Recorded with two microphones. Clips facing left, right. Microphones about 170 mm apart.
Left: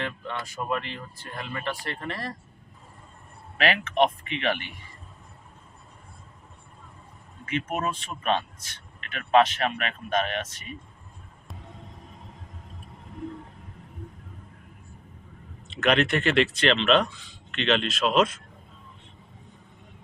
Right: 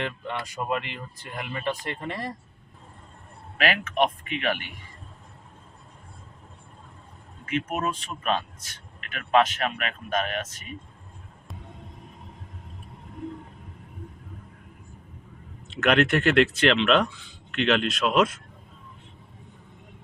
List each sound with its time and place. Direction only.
0.0 s speech: 20° right (ahead or behind)
3.6 s a man's voice: centre (ahead or behind)
7.4 s a man's voice: centre (ahead or behind)
15.7 s a man's voice: centre (ahead or behind)